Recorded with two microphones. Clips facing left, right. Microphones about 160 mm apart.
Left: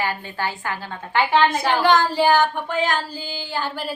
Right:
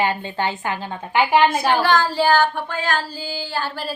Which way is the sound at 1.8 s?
20° left (ahead or behind).